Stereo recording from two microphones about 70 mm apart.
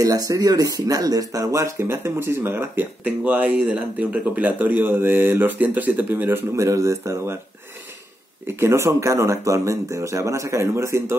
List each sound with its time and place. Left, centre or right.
0.0 s speech: right
6.6 s speech: right
8.5 s speech: right